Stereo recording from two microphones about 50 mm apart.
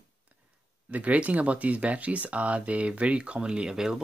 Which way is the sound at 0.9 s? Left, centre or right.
Right.